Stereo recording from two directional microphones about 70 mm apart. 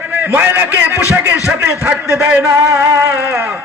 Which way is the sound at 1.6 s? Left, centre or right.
Right.